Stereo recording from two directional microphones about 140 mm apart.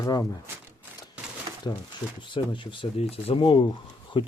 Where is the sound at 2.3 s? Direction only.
35° left (ahead or behind).